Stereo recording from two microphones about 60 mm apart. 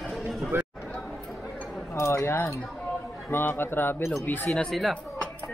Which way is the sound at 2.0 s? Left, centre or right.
Left.